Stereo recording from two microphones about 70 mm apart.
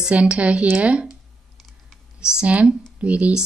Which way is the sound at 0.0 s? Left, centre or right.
Centre.